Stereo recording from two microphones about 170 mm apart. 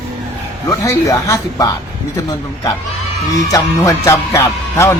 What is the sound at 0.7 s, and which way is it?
A man's voice, 20° left (ahead or behind).